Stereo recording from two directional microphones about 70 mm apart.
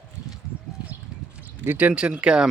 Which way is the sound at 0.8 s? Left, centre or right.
Right.